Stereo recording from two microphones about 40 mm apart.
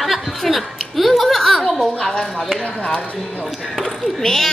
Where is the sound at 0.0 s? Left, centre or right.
Centre.